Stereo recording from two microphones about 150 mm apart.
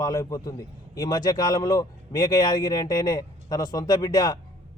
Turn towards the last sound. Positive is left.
turn(degrees=25)  # may be behind; listen again after turning